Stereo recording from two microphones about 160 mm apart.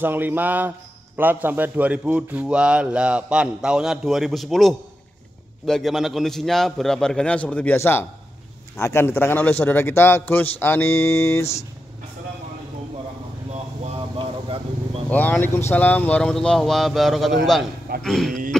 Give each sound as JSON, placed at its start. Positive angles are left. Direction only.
{"t": 0.0, "sound": "a man's voice", "side_deg": -15}
{"t": 13.9, "sound": "a sound", "side_deg": -35}
{"t": 15.0, "sound": "speech", "side_deg": 10}